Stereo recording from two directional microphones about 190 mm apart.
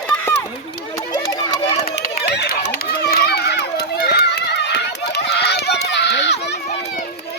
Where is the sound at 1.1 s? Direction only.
20° left (ahead or behind).